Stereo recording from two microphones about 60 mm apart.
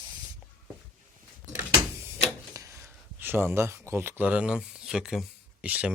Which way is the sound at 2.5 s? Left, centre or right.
Right.